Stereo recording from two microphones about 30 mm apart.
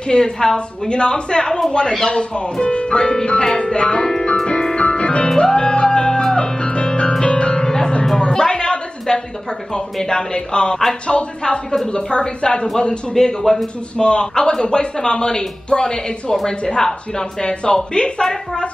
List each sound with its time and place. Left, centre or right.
0.0 s speech: left
4.7 s music: left
7.5 s music: left
9.0 s a woman's voice: left
13.1 s a man's voice: centre
13.9 s speech: left
18.2 s a woman's voice: left